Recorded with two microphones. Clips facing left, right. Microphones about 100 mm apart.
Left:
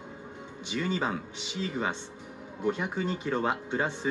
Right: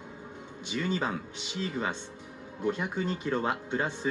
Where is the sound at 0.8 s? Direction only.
15° left (ahead or behind).